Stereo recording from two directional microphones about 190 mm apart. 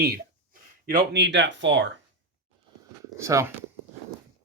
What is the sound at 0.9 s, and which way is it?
Speech, 65° right (ahead or behind).